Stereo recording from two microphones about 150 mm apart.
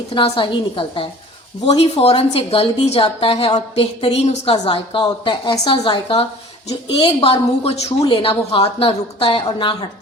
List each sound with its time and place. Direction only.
0.1 s a woman's voice: 35° left (ahead or behind)